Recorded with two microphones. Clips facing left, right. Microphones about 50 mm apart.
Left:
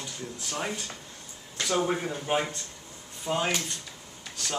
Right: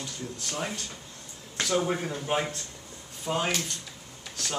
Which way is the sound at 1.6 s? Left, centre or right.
Centre.